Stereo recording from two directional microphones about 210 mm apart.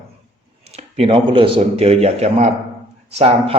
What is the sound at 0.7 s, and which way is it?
A man's voice, 30° right (ahead or behind).